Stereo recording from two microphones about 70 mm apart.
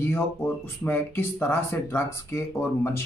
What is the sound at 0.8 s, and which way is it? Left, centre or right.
Speech, left.